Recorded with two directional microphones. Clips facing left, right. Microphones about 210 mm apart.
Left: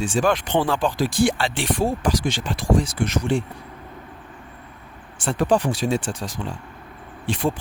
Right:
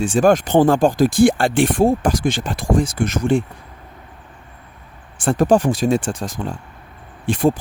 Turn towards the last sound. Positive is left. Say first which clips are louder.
# right 6 dB
turn(degrees=-45)  # may be behind; listen again after turning